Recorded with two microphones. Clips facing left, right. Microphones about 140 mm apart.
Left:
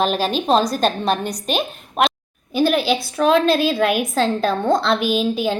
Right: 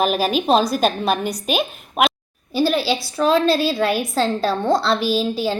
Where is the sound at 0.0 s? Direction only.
5° right (ahead or behind).